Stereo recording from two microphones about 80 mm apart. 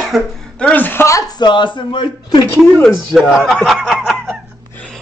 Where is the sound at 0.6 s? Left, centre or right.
Left.